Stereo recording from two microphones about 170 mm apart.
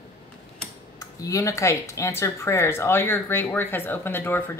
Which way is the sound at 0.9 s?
20° left (ahead or behind).